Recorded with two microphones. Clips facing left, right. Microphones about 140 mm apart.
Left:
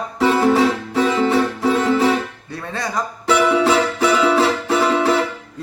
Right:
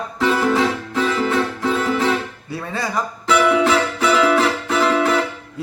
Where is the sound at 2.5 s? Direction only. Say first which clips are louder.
Right 1 dB; 5° right (ahead or behind).